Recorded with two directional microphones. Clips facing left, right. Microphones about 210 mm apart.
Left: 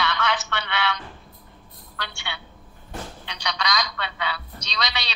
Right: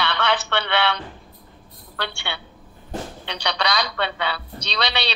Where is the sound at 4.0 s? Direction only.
30° right (ahead or behind).